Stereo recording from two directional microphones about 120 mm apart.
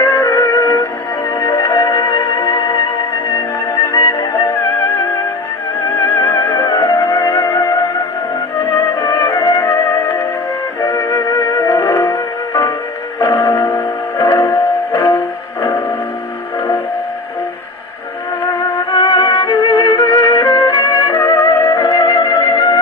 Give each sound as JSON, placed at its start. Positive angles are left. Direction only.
{"t": 0.0, "sound": "music", "side_deg": 25}
{"t": 3.8, "sound": "music", "side_deg": 30}
{"t": 18.4, "sound": "music", "side_deg": 35}